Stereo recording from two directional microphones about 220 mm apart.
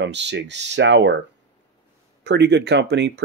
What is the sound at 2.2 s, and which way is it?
Speech, 50° right (ahead or behind).